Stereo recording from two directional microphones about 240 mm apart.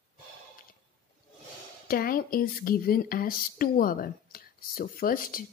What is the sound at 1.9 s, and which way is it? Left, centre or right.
Speech, left.